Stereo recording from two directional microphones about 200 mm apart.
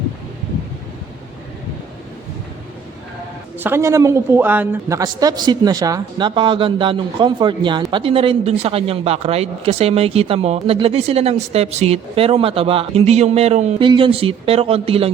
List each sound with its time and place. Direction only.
3.6 s a woman's voice: 15° right (ahead or behind); by 15.1 s 30° right (ahead or behind)